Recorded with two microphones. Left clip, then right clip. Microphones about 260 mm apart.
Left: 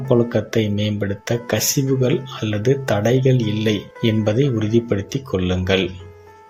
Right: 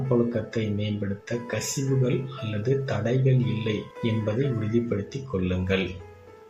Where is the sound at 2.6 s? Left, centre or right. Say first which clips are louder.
Left 8 dB; left.